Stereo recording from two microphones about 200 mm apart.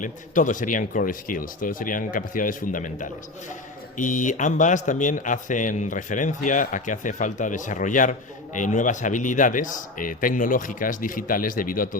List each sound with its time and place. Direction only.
0.0 s speech: 40° left (ahead or behind)